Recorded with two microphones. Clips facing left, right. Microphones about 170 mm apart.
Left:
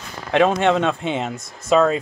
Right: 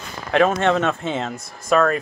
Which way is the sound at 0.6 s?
15° left (ahead or behind).